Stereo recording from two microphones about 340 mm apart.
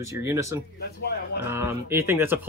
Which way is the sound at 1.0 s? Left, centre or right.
Left.